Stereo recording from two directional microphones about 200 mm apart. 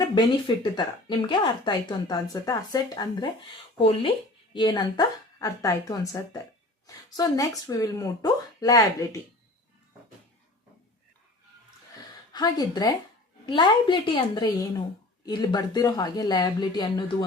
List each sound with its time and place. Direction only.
0.0 s speech: 20° left (ahead or behind)
12.3 s speech: 20° left (ahead or behind)